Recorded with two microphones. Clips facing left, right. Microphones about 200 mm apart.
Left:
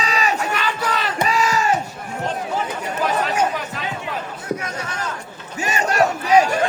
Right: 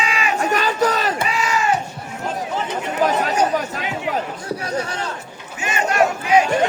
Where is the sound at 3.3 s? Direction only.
40° right (ahead or behind).